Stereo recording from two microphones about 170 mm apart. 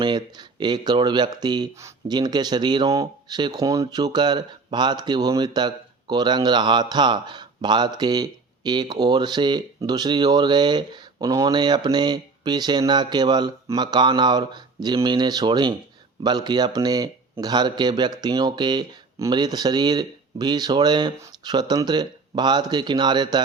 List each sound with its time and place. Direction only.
0.0 s speech: 25° right (ahead or behind)